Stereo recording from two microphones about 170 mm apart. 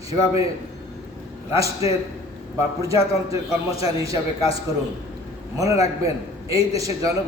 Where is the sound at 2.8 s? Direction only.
20° right (ahead or behind).